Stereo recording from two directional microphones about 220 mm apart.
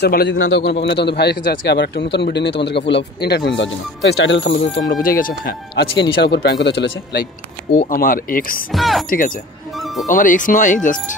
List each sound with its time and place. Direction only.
0.0 s a man's voice: 45° left (ahead or behind)
7.9 s speech: 40° left (ahead or behind)
8.7 s speech: centre (ahead or behind)
10.0 s speech: 40° left (ahead or behind)